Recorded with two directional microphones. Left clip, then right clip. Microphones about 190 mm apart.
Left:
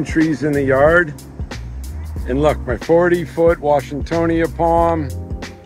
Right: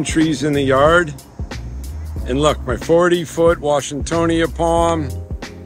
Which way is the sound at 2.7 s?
Centre (ahead or behind).